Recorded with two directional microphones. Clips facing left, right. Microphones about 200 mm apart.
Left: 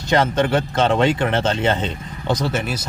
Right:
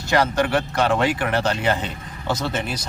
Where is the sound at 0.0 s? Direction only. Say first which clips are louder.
Left 2 dB; 20° left (ahead or behind).